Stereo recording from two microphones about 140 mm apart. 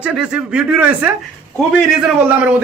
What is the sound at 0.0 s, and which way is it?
Speech, 5° right (ahead or behind).